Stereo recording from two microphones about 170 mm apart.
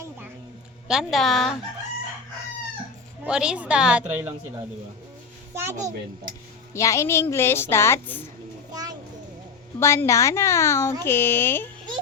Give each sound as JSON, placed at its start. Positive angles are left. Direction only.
{"t": 0.9, "sound": "a woman's voice", "side_deg": 0}
{"t": 3.2, "sound": "a woman's voice", "side_deg": -5}
{"t": 5.5, "sound": "a child's voice", "side_deg": -15}
{"t": 6.7, "sound": "a woman's voice", "side_deg": 15}
{"t": 8.7, "sound": "a sound", "side_deg": -25}
{"t": 9.8, "sound": "a woman's voice", "side_deg": 15}